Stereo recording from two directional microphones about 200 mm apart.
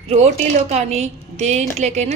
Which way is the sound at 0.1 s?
35° right (ahead or behind).